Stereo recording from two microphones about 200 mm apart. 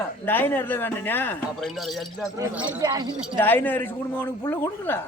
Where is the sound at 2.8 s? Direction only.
20° right (ahead or behind).